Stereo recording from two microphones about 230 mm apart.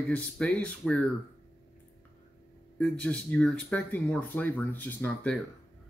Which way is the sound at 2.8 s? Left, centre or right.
Centre.